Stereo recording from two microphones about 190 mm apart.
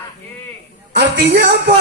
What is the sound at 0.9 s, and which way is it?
Music, 60° right (ahead or behind).